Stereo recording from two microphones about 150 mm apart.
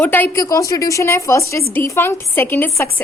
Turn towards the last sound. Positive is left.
turn(degrees=15)  # may be behind; listen again after turning